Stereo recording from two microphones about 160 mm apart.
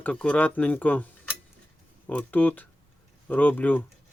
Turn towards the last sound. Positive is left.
turn(degrees=10)  # may be behind; listen again after turning